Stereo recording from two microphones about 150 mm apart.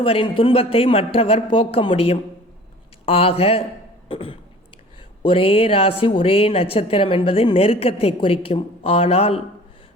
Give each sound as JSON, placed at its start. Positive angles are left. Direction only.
{"t": 0.0, "sound": "a woman's voice", "side_deg": 35}